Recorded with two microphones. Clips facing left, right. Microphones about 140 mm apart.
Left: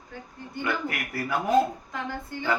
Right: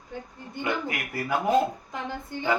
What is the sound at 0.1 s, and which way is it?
A woman's voice, 20° right (ahead or behind).